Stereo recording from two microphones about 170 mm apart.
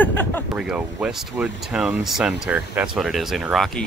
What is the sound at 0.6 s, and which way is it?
Speech, 5° right (ahead or behind).